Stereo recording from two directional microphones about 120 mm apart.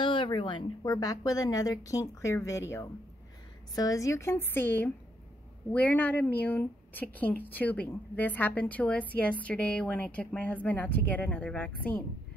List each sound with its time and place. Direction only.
0.0 s speech: 45° left (ahead or behind); by 2.6 s 25° left (ahead or behind)
3.7 s a woman's voice: 30° left (ahead or behind); by 12.0 s 10° left (ahead or behind)